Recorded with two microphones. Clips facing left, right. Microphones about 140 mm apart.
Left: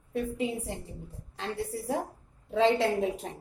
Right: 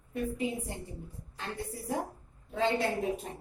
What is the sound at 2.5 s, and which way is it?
Speech, 90° left.